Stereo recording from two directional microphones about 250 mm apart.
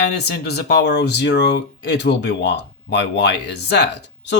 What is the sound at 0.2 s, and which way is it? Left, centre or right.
Speech, left.